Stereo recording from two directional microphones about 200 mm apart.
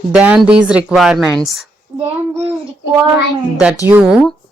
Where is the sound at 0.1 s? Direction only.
5° right (ahead or behind).